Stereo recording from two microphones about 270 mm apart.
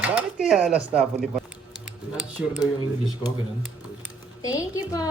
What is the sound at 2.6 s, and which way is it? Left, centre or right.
Speech, centre.